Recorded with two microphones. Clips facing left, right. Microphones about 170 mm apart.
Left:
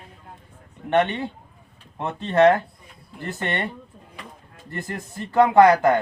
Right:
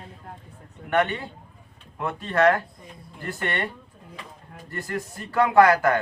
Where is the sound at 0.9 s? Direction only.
25° left (ahead or behind).